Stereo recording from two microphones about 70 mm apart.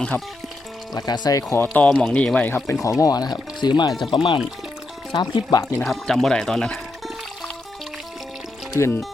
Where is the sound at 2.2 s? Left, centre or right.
Centre.